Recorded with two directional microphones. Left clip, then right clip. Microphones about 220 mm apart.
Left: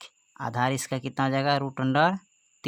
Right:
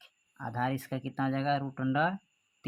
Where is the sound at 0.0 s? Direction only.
40° left (ahead or behind).